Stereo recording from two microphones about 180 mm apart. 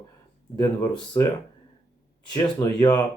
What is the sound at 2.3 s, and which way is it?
Speech, 20° left (ahead or behind).